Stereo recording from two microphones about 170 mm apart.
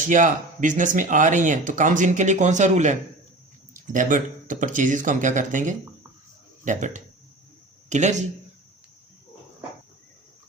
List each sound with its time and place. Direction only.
0.0 s speech: 50° right (ahead or behind)